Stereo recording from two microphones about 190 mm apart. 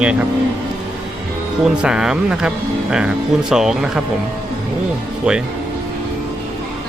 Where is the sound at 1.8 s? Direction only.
5° right (ahead or behind).